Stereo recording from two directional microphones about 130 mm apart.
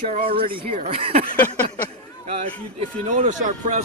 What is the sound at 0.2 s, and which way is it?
A man's voice, 45° right (ahead or behind).